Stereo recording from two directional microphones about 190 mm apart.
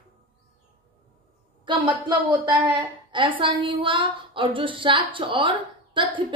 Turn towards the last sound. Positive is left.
turn(degrees=-25)  # may be behind; listen again after turning